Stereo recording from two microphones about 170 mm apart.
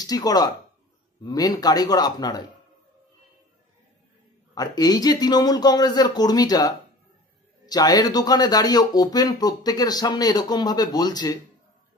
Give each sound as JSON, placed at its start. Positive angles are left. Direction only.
{"t": 0.0, "sound": "speech", "side_deg": 20}
{"t": 4.6, "sound": "speech", "side_deg": 25}